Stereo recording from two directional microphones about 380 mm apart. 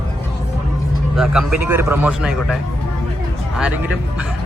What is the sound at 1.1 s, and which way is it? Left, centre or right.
A man's voice, centre.